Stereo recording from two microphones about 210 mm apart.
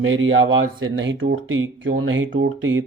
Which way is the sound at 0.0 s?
70° right (ahead or behind).